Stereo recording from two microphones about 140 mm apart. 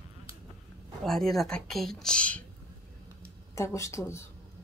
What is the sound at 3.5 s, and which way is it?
Speech, 20° left (ahead or behind).